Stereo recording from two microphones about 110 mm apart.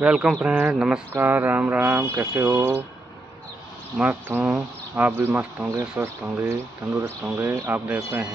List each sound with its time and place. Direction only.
0.0 s speech: 10° right (ahead or behind)
4.1 s speech: 20° right (ahead or behind)